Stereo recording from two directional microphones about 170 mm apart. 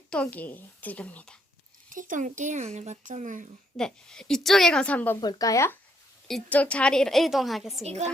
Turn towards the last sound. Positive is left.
turn(degrees=0)  # may be behind; listen again after turning